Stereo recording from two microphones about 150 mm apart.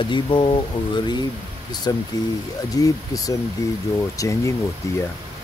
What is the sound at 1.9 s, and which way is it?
Speech, 25° left (ahead or behind).